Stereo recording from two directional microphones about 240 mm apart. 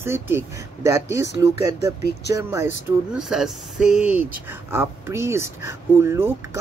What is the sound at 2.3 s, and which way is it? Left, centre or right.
Speech, centre.